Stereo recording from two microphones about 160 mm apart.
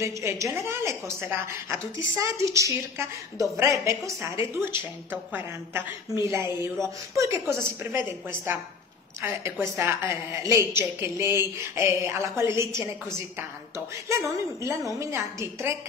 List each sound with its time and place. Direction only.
0.0 s a woman's voice: 15° right (ahead or behind)
14.0 s a woman's voice: 20° right (ahead or behind)